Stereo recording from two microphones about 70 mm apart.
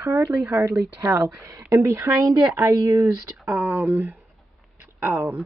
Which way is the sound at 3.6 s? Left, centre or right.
Right.